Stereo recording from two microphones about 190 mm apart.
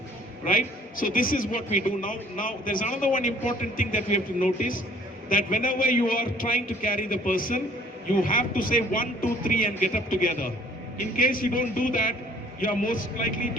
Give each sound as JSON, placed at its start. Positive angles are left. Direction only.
{"t": 0.4, "sound": "a man's voice", "side_deg": 45}